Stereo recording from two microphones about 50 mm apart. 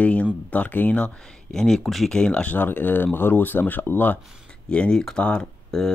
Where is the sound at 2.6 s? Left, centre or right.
Left.